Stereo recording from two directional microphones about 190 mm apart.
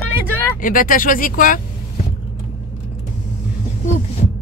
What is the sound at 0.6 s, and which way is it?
Speech, 45° left (ahead or behind).